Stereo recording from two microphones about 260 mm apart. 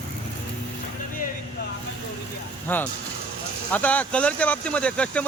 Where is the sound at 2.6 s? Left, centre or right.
Centre.